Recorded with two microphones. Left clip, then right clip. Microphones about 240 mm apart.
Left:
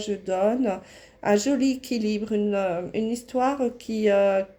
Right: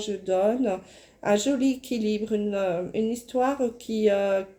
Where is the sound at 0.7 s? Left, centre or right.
Left.